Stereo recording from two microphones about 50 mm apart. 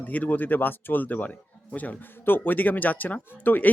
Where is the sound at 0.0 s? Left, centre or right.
Left.